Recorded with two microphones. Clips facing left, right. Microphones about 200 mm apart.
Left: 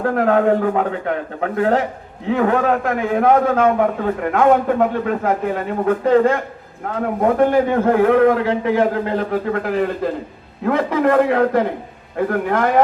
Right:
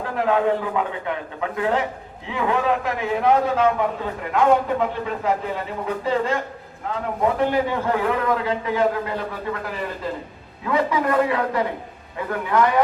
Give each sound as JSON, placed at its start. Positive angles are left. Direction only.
{"t": 0.0, "sound": "a man's voice", "side_deg": 50}